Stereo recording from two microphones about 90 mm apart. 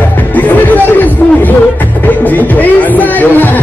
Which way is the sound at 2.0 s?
20° left (ahead or behind).